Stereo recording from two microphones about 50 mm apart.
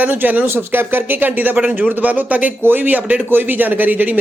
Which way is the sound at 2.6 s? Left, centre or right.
Right.